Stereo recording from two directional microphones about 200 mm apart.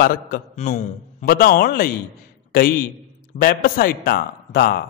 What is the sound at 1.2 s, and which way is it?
A man's voice, 50° left (ahead or behind).